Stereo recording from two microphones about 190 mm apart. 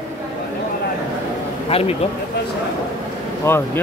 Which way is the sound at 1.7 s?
30° left (ahead or behind).